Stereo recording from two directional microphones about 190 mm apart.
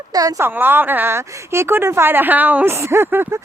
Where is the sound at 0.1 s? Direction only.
20° right (ahead or behind).